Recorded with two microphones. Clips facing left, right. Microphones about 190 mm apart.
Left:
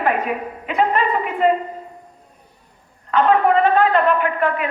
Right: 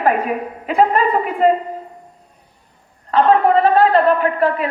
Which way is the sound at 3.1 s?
35° right (ahead or behind).